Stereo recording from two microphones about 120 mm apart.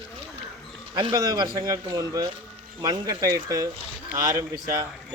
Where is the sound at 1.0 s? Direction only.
35° right (ahead or behind).